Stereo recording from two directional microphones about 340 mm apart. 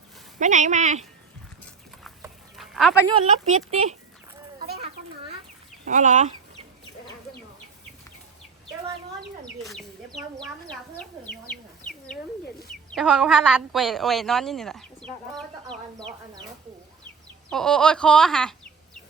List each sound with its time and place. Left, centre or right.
0.3 s speech: right
1.6 s a sound: centre
3.1 s speech: right
5.8 s speech: right
10.2 s speech: centre
11.9 s bird: centre
12.9 s speech: centre
17.5 s speech: centre